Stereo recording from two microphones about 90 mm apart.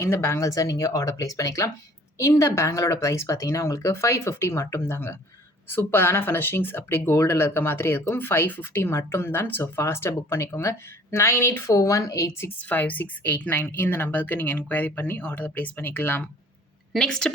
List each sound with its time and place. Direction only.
0.0 s speech: 30° left (ahead or behind)
12.6 s speech: 20° left (ahead or behind)
16.9 s a woman's voice: 5° left (ahead or behind)